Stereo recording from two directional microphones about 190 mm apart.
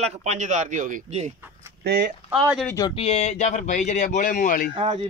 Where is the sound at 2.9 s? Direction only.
30° left (ahead or behind).